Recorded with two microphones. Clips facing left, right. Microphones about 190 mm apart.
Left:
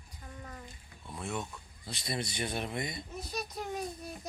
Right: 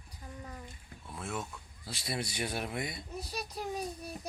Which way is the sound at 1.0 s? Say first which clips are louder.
Left 1 dB; centre (ahead or behind).